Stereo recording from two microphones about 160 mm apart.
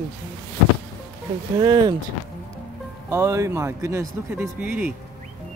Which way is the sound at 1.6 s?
25° right (ahead or behind).